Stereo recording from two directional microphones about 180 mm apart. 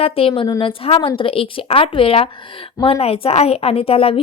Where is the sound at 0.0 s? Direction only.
30° left (ahead or behind).